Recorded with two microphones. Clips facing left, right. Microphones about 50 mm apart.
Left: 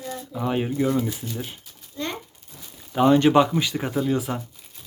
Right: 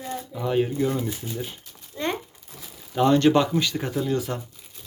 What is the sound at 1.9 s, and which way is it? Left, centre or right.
Crumpling, right.